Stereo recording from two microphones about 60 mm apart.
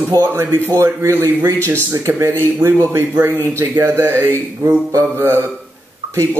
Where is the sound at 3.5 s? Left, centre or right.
Right.